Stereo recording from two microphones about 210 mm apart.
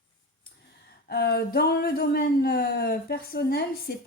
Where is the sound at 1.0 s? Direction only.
50° left (ahead or behind).